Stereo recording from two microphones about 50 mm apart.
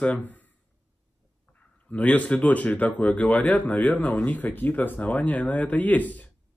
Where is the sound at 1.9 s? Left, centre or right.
Left.